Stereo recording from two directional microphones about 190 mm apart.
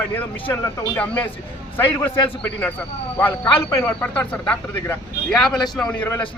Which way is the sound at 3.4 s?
20° left (ahead or behind).